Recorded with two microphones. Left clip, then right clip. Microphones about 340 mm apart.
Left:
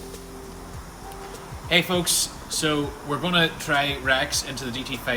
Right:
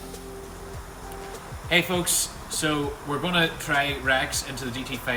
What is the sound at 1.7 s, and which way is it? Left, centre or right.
A man's voice, centre.